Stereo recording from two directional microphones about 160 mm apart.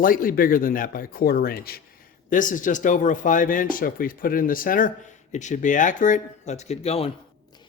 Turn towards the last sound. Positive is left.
turn(degrees=40)  # may be behind; listen again after turning